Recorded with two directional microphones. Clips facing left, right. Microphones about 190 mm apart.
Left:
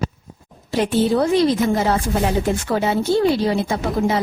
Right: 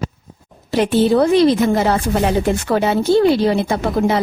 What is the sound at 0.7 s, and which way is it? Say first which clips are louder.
Speech: right 4 dB; 70° right (ahead or behind).